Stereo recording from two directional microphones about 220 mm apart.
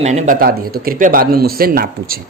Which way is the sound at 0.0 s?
30° right (ahead or behind).